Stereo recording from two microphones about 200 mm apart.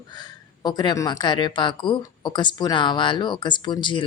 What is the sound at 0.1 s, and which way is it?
A woman's voice, 20° left (ahead or behind).